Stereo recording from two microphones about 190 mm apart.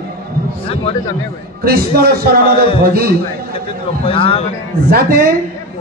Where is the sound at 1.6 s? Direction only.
55° right (ahead or behind).